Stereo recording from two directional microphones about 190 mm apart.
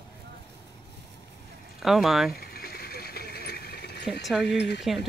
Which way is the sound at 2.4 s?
55° left (ahead or behind).